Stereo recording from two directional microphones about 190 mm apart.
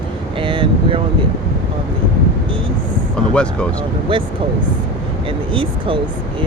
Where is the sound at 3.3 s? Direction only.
5° left (ahead or behind).